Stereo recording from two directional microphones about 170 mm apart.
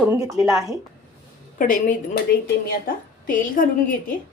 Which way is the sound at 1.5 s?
50° left (ahead or behind).